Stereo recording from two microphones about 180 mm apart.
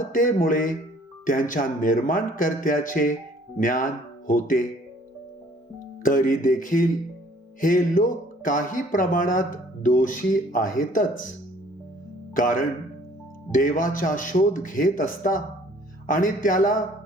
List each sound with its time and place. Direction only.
0.1 s speech: 50° left (ahead or behind)
6.0 s speech: 50° left (ahead or behind)
12.3 s speech: 50° left (ahead or behind)